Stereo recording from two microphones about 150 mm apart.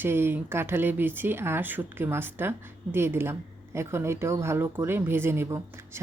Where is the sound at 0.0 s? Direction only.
15° right (ahead or behind).